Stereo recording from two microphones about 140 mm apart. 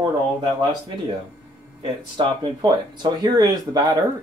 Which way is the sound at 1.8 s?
35° right (ahead or behind).